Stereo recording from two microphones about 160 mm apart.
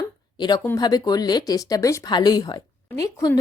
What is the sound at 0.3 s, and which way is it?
A woman's voice, 25° left (ahead or behind).